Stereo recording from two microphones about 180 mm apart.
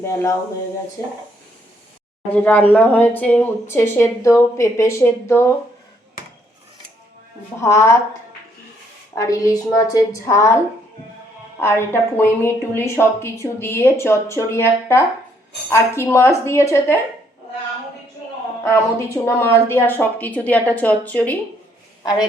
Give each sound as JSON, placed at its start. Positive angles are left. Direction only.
{"t": 0.0, "sound": "speech", "side_deg": 15}
{"t": 2.3, "sound": "speech", "side_deg": 10}
{"t": 7.6, "sound": "speech", "side_deg": 15}
{"t": 9.1, "sound": "speech", "side_deg": 20}
{"t": 11.6, "sound": "speech", "side_deg": 15}
{"t": 18.6, "sound": "a woman's voice", "side_deg": 15}